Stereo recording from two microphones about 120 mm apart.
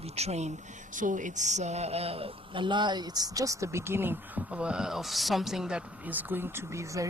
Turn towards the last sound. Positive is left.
turn(degrees=-25)  # may be behind; listen again after turning